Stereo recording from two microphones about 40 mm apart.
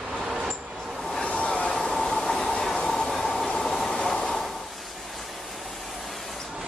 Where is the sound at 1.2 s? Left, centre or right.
Left.